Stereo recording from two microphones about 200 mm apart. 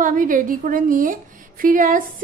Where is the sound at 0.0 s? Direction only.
40° right (ahead or behind).